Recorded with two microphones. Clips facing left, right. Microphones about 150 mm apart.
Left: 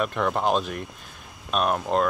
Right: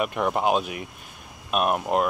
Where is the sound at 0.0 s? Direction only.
10° right (ahead or behind).